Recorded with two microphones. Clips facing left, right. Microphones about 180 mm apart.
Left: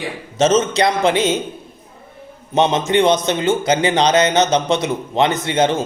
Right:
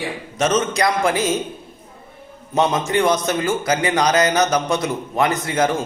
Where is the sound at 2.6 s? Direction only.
20° left (ahead or behind).